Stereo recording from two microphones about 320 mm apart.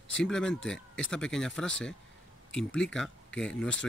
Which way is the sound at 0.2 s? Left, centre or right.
Centre.